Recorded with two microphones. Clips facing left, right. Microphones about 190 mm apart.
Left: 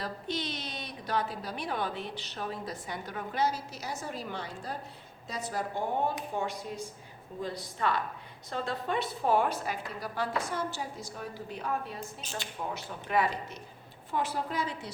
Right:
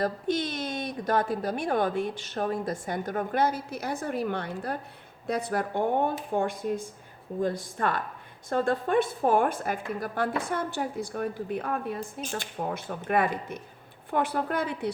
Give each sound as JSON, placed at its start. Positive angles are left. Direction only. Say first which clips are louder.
{"t": 0.0, "sound": "a woman's voice", "louder": "right 8 dB", "side_deg": -50}